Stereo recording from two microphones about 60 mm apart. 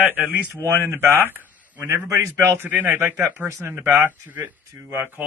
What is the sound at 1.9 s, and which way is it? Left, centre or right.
Speech, right.